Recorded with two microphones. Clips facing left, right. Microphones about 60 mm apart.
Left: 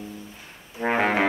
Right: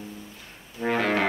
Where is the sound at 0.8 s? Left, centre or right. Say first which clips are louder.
Left 2 dB; left.